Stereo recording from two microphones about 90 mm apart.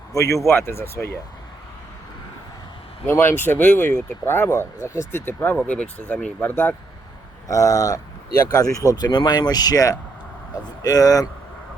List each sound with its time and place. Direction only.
0.1 s speech: 35° left (ahead or behind)
3.1 s speech: 25° left (ahead or behind)
6.4 s speech: 20° left (ahead or behind)
7.4 s speech: 40° left (ahead or behind)